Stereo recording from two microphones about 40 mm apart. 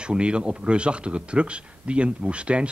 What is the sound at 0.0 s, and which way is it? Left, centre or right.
Speech, right.